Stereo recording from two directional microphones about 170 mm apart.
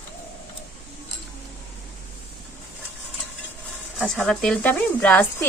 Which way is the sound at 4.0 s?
5° left (ahead or behind).